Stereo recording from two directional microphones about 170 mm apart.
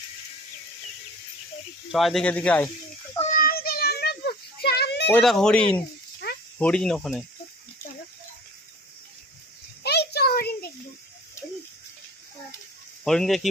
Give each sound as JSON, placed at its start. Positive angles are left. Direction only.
{"t": 1.9, "sound": "speech", "side_deg": 0}
{"t": 3.3, "sound": "children playing", "side_deg": 60}
{"t": 5.1, "sound": "speech", "side_deg": 0}
{"t": 9.8, "sound": "a sound", "side_deg": 75}
{"t": 13.1, "sound": "speech", "side_deg": 0}